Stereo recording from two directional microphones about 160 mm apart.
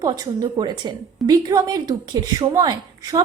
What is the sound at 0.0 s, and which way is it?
A woman's voice, 25° right (ahead or behind).